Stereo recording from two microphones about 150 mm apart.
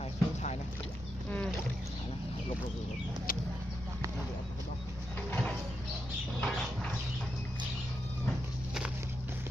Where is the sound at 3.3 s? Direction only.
70° left (ahead or behind).